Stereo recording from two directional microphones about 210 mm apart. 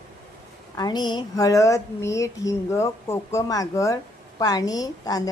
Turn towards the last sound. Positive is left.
turn(degrees=15)  # may be behind; listen again after turning